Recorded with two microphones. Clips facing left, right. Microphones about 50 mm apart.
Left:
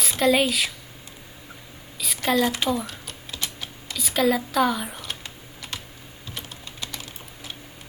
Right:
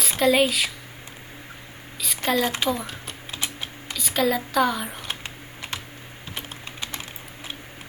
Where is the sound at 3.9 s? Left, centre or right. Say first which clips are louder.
Left 1 dB; centre.